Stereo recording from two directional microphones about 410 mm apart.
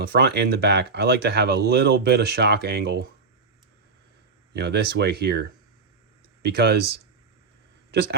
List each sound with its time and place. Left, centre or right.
0.1 s speech: right
4.5 s speech: right